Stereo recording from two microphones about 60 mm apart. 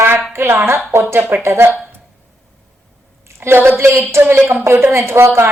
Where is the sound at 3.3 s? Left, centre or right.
Right.